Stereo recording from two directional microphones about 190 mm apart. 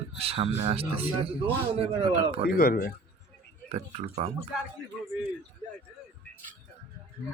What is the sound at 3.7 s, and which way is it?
Speech, 30° right (ahead or behind).